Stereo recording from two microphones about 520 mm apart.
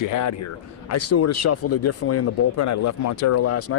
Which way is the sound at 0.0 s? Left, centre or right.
Left.